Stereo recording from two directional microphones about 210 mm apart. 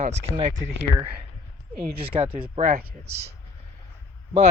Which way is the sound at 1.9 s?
25° right (ahead or behind).